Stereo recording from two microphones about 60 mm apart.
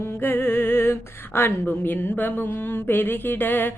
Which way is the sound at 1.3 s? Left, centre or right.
Left.